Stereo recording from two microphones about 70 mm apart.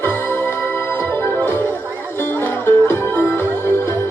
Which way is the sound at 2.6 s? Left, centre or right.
Left.